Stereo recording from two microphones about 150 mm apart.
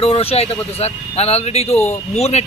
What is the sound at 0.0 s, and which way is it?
Speech, 40° left (ahead or behind).